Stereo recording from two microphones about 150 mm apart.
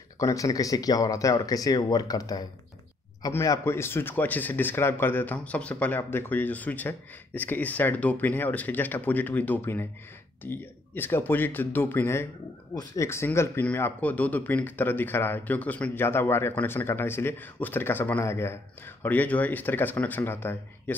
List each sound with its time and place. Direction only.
0.2 s a man's voice: 20° left (ahead or behind)